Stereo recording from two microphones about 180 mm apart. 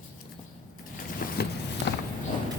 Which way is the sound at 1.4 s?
60° left (ahead or behind).